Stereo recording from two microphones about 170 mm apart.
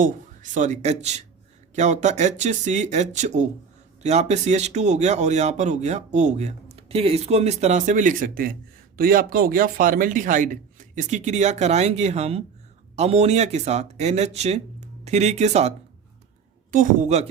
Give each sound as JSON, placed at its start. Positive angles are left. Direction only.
{"t": 0.5, "sound": "a man's voice", "side_deg": -45}
{"t": 16.7, "sound": "a man's voice", "side_deg": -50}